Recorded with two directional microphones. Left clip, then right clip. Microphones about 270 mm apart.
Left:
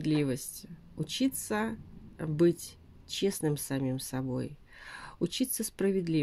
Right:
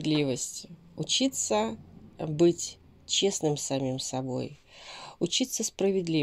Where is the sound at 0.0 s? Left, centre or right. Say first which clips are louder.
Right 3 dB; left.